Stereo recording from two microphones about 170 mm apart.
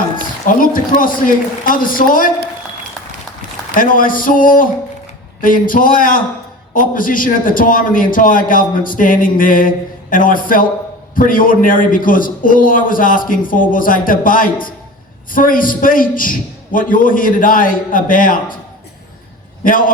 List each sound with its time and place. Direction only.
0.4 s a man's voice: 55° left (ahead or behind)
3.8 s a man's voice: 55° left (ahead or behind)
19.6 s a man's voice: 55° left (ahead or behind)